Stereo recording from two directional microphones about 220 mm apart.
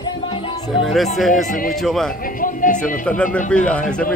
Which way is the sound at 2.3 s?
35° left (ahead or behind).